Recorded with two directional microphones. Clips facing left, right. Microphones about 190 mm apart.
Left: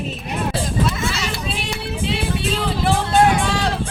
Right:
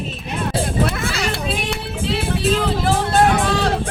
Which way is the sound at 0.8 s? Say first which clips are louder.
Right 1 dB; 60° right (ahead or behind).